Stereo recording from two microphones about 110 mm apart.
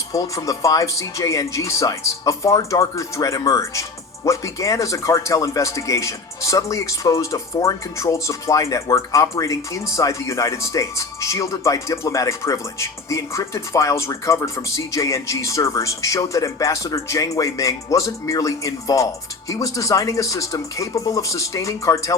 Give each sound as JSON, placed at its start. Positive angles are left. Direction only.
{"t": 0.1, "sound": "speech", "side_deg": 30}